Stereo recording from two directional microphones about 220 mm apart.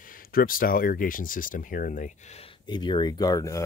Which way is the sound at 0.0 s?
40° left (ahead or behind).